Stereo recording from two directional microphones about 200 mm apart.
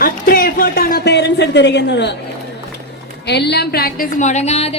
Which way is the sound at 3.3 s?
55° left (ahead or behind).